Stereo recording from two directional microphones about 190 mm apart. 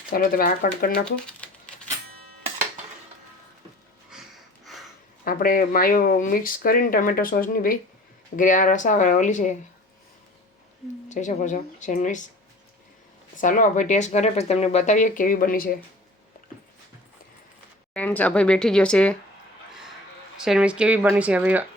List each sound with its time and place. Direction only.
0.1 s speech: 50° left (ahead or behind)
1.0 s typing: 5° left (ahead or behind)
4.1 s a sound: 5° right (ahead or behind)
5.2 s speech: 50° left (ahead or behind)
11.1 s speech: 40° left (ahead or behind)
13.3 s speech: 45° left (ahead or behind)
17.9 s speech: 10° left (ahead or behind)
20.4 s speech: 5° right (ahead or behind)